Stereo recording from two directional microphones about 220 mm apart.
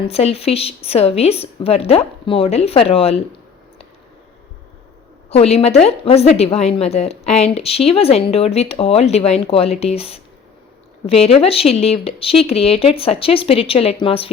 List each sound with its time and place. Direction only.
0.1 s a woman's voice: 30° left (ahead or behind)
5.3 s a woman's voice: 30° left (ahead or behind)